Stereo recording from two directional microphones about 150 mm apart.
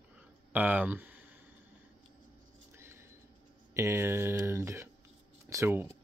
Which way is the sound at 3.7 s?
20° right (ahead or behind).